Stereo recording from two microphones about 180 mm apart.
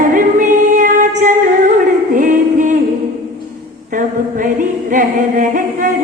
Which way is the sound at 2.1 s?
45° right (ahead or behind).